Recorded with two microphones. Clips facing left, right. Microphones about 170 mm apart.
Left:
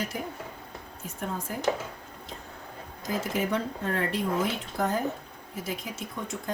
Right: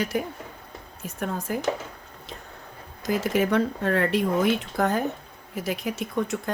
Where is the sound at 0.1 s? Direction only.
75° right (ahead or behind).